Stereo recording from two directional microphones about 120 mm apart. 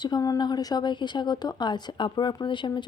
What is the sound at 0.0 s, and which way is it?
Speech, 35° left (ahead or behind).